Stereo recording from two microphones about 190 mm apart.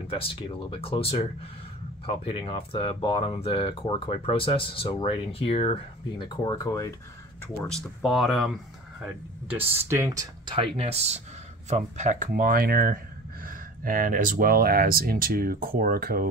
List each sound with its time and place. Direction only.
0.1 s speech: 30° left (ahead or behind)
7.4 s speech: 5° left (ahead or behind); by 16.3 s 50° right (ahead or behind)